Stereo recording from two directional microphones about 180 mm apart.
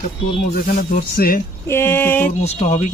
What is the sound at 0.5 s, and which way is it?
Speech, 50° left (ahead or behind).